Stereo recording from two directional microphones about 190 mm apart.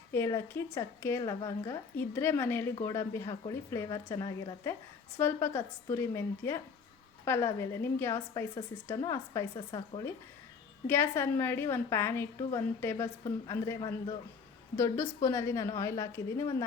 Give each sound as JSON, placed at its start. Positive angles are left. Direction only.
{"t": 0.1, "sound": "speech", "side_deg": 15}
{"t": 8.3, "sound": "a woman's voice", "side_deg": 25}
{"t": 10.8, "sound": "speech", "side_deg": 10}